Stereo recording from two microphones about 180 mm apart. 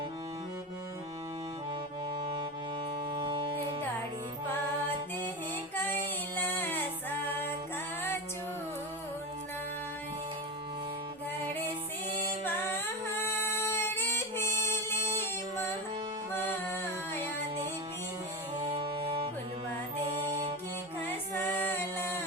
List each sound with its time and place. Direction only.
3.1 s wind instrument: 25° right (ahead or behind)
5.7 s music: 10° left (ahead or behind)
12.5 s music: 10° left (ahead or behind)
18.8 s music: 25° right (ahead or behind)
21.3 s a capella: 10° left (ahead or behind)